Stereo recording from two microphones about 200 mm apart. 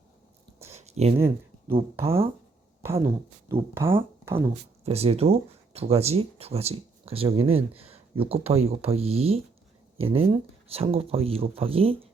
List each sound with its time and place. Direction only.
0.7 s a sound: 35° right (ahead or behind)
1.1 s speech: 15° right (ahead or behind)
1.7 s speech: 30° right (ahead or behind)
3.5 s speech: 10° right (ahead or behind)
4.4 s speech: 30° right (ahead or behind)